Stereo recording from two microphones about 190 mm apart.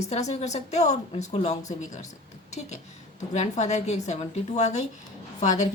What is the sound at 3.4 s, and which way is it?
A woman's voice, 35° left (ahead or behind).